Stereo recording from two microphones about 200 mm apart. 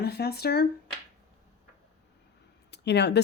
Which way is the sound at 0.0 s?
55° left (ahead or behind).